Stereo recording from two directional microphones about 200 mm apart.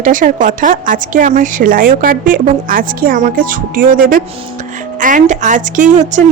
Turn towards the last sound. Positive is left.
turn(degrees=-35)  # may be behind; listen again after turning